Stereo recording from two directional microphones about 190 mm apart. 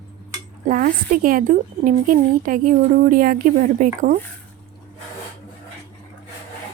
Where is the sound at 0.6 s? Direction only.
45° right (ahead or behind).